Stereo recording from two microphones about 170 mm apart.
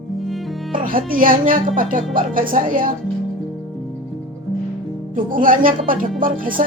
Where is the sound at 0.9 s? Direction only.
55° right (ahead or behind).